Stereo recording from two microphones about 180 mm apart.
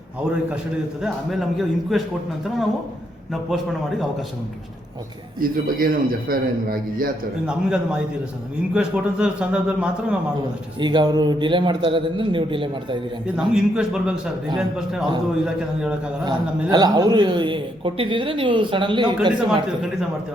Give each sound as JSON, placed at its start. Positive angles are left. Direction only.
{"t": 1.0, "sound": "a man's voice", "side_deg": 0}
{"t": 3.5, "sound": "a man's voice", "side_deg": -5}
{"t": 5.4, "sound": "a man's voice", "side_deg": -50}
{"t": 7.4, "sound": "a man's voice", "side_deg": -5}
{"t": 10.8, "sound": "a man's voice", "side_deg": -25}
{"t": 13.3, "sound": "a man's voice", "side_deg": -5}
{"t": 16.2, "sound": "a man's voice", "side_deg": -20}